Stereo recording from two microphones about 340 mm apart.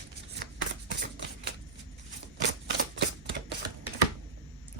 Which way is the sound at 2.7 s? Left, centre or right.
Right.